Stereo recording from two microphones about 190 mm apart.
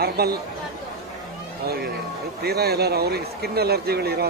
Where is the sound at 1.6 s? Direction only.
55° right (ahead or behind).